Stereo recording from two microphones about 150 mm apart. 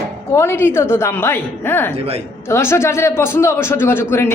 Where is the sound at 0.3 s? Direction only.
15° left (ahead or behind).